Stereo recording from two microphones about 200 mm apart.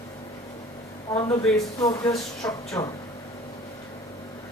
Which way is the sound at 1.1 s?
15° left (ahead or behind).